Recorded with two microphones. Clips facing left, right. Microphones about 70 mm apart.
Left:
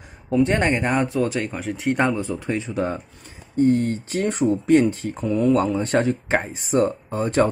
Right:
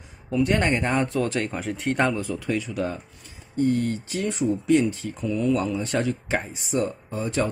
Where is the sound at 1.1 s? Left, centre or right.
Centre.